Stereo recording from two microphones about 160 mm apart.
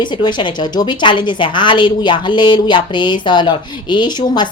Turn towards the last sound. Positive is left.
turn(degrees=25)  # may be behind; listen again after turning